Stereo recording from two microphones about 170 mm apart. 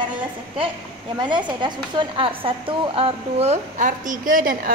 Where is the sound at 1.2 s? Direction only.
25° right (ahead or behind).